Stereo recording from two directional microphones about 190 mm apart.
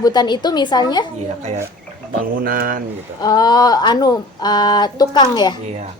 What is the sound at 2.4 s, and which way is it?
Speech, 50° right (ahead or behind).